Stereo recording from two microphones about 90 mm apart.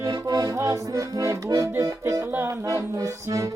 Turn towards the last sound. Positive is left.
turn(degrees=-40)  # may be behind; listen again after turning